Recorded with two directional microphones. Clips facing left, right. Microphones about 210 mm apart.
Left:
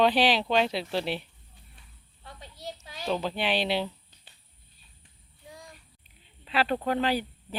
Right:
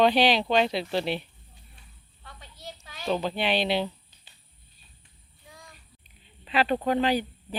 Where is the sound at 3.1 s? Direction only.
Centre (ahead or behind).